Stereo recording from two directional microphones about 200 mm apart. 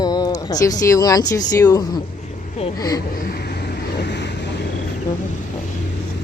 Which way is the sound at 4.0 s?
60° left (ahead or behind).